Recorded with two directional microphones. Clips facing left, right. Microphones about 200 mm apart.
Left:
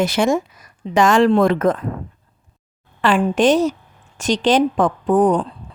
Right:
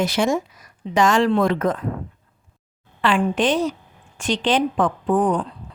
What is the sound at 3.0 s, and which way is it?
A woman's voice, 45° left (ahead or behind).